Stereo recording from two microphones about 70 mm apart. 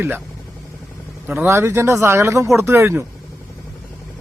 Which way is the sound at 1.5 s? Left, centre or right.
Right.